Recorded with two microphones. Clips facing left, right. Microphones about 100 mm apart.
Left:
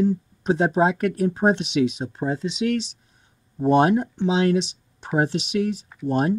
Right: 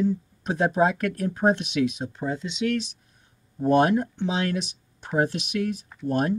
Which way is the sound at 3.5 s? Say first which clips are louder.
Left 2 dB; 20° left (ahead or behind).